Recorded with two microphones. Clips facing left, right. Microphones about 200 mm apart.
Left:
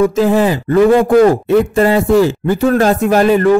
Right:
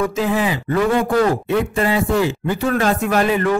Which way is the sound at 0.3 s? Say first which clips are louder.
Left 7 dB; 40° left (ahead or behind).